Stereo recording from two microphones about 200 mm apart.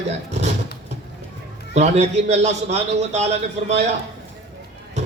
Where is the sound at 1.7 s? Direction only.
35° right (ahead or behind).